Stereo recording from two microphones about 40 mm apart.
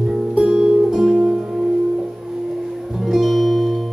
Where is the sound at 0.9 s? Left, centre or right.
Centre.